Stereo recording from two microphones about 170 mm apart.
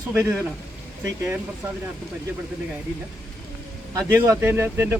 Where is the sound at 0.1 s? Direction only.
10° right (ahead or behind).